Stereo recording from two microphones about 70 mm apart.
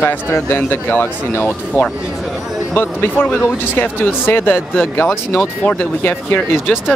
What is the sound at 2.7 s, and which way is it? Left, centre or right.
Speech, left.